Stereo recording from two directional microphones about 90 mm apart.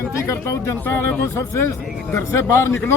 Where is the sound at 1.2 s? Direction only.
35° left (ahead or behind).